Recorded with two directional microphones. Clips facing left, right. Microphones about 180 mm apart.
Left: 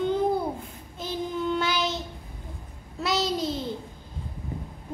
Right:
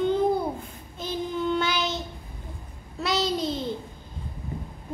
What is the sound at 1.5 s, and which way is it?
Child singing, centre (ahead or behind).